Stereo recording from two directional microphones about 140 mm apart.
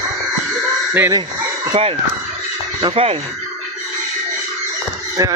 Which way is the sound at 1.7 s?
40° right (ahead or behind).